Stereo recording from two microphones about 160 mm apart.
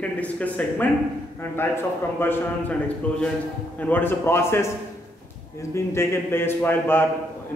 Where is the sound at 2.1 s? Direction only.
15° left (ahead or behind).